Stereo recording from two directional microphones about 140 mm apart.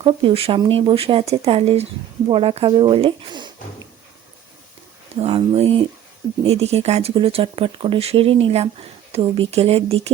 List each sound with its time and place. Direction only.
0.0 s speech: 40° right (ahead or behind)
5.2 s speech: 45° right (ahead or behind)